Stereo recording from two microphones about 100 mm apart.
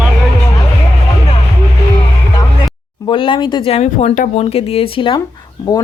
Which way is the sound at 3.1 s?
60° left (ahead or behind).